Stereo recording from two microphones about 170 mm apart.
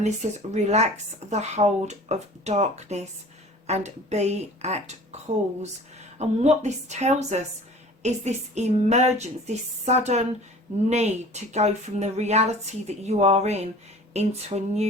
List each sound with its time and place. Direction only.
0.5 s speech: 40° right (ahead or behind)